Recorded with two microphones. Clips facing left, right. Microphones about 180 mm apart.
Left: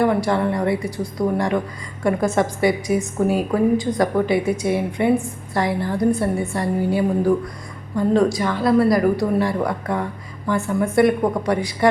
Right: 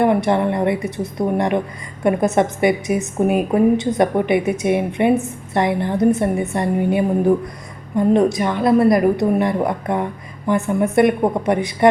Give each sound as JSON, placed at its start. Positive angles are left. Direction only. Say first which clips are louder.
{"t": 0.0, "sound": "a woman's voice", "louder": "right 2 dB", "side_deg": -20}